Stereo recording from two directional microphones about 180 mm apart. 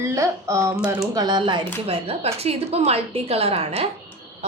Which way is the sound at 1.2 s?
25° right (ahead or behind).